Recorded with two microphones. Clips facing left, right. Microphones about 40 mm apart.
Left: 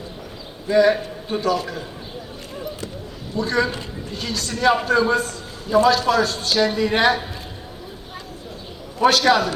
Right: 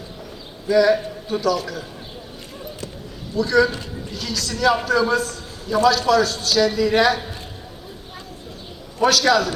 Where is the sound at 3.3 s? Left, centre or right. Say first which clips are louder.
Right 4 dB; left.